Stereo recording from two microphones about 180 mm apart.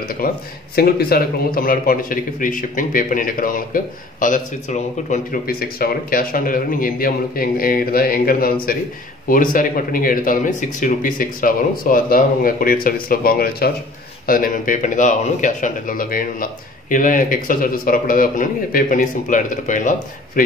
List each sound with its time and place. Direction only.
0.2 s a man's voice: 55° left (ahead or behind)